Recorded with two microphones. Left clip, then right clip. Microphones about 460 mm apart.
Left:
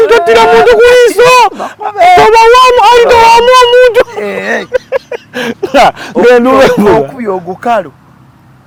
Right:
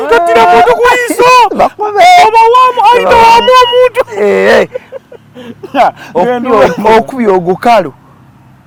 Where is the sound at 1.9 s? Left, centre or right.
Right.